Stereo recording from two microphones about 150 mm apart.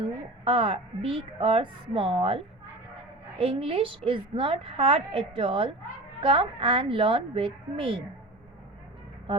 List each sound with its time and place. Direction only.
0.0 s a woman's voice: 35° right (ahead or behind)